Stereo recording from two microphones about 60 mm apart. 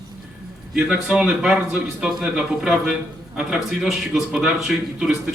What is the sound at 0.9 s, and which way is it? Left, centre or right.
A man's voice, centre.